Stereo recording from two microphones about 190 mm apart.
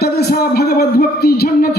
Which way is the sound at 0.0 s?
55° left (ahead or behind).